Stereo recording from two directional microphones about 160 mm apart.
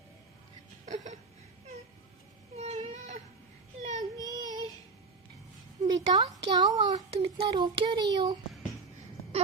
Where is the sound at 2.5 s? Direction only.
40° right (ahead or behind).